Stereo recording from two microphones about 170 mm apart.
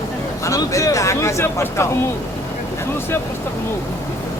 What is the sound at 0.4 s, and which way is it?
Speech, 20° left (ahead or behind).